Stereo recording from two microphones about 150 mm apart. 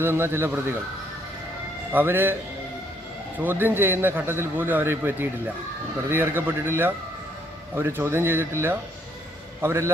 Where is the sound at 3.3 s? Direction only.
15° right (ahead or behind).